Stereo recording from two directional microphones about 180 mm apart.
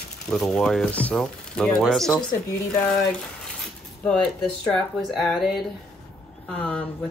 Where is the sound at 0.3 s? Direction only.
5° left (ahead or behind).